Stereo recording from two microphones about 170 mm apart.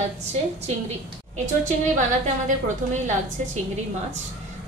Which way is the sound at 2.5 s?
45° right (ahead or behind).